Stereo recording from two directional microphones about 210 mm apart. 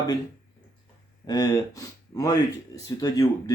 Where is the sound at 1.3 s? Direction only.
15° left (ahead or behind).